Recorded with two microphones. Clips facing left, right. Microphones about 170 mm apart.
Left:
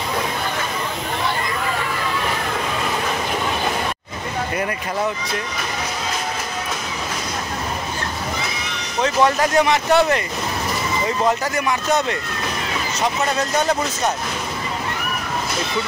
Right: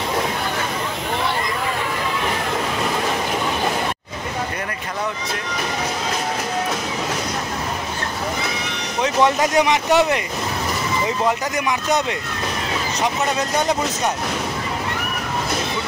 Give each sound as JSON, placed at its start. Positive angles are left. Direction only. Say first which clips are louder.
{"t": 9.0, "sound": "speech", "louder": "even", "side_deg": -15}
{"t": 11.5, "sound": "speech", "louder": "left 1 dB", "side_deg": -15}